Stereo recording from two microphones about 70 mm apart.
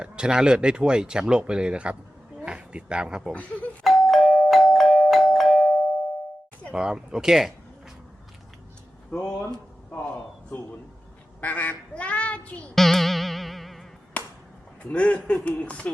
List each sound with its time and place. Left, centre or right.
0.0 s speech: centre
3.8 s doorbell: centre
6.7 s speech: centre
11.3 s duck: left
12.7 s music: centre
14.2 s a sound: left
14.8 s speech: centre